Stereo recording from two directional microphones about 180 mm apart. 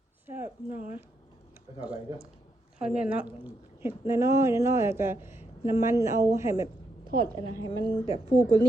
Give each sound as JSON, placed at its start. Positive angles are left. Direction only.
{"t": 0.3, "sound": "speech", "side_deg": -10}
{"t": 2.7, "sound": "a woman's voice", "side_deg": -5}